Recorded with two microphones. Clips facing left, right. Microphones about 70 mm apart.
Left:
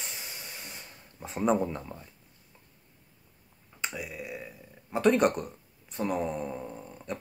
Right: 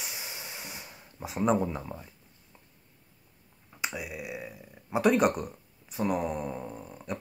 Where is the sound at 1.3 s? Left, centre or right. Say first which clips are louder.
Even; centre.